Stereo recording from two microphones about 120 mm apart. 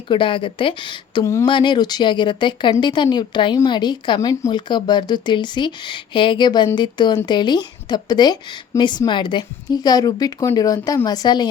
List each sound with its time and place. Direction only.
0.1 s speech: 45° left (ahead or behind)
1.2 s speech: 25° left (ahead or behind)
1.5 s a woman's voice: 40° left (ahead or behind)